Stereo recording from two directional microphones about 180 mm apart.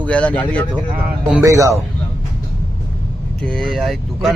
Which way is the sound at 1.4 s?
15° right (ahead or behind).